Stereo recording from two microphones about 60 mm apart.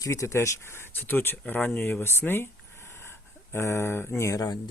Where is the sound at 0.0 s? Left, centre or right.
Left.